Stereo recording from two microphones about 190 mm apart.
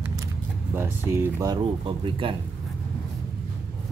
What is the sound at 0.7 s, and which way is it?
Speech, 10° right (ahead or behind).